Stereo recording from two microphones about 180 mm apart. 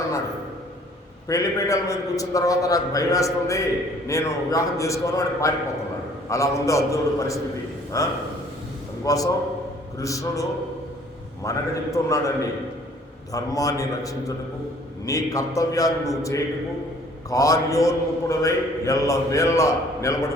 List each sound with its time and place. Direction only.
1.3 s a man's voice: 20° left (ahead or behind)
11.4 s a man's voice: 15° left (ahead or behind)